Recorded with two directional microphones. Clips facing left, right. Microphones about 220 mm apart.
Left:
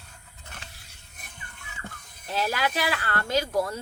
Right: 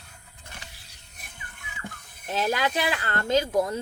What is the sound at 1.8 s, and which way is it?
Speech, 15° right (ahead or behind).